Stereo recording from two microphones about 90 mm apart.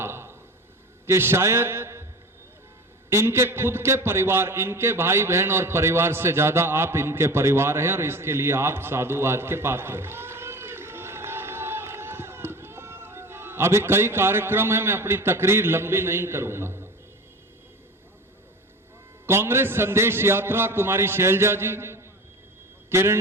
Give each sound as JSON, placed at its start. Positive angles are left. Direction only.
{"t": 0.0, "sound": "a sound", "side_deg": -30}
{"t": 1.0, "sound": "a man's voice", "side_deg": -30}
{"t": 3.1, "sound": "a man's voice", "side_deg": -30}
{"t": 19.2, "sound": "a man's voice", "side_deg": -25}